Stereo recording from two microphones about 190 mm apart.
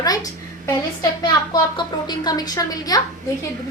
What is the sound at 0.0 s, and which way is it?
Speech, 20° left (ahead or behind).